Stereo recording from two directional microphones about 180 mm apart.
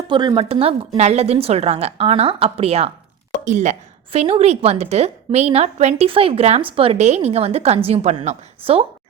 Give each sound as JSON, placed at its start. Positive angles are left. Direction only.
{"t": 0.1, "sound": "a woman's voice", "side_deg": -25}